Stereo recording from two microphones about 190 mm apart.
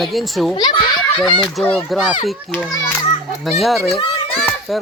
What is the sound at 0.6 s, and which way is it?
Speech, 20° left (ahead or behind).